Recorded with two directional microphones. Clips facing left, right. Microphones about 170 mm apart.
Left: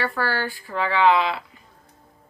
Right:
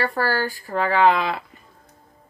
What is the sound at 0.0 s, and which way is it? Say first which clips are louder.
Speech: right 3 dB; 40° right (ahead or behind).